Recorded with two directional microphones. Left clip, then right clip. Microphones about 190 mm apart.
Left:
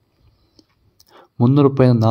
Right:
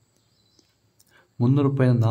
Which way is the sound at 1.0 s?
30° left (ahead or behind).